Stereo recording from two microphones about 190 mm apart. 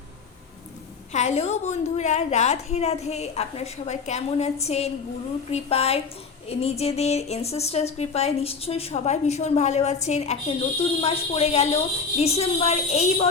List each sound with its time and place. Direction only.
1.1 s a woman's voice: 35° left (ahead or behind)